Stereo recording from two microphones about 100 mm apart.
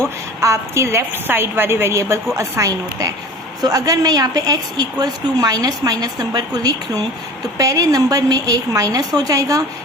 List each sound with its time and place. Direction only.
0.4 s a woman's voice: 30° right (ahead or behind)